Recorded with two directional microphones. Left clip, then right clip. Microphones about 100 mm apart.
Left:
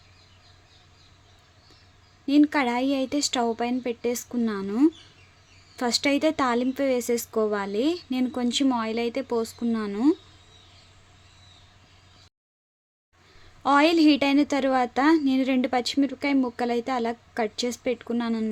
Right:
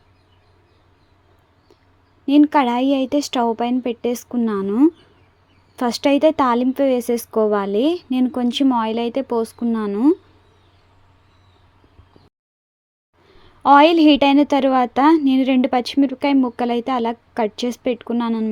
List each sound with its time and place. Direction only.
2.2 s a woman's voice: 25° right (ahead or behind)
13.6 s a woman's voice: 20° right (ahead or behind)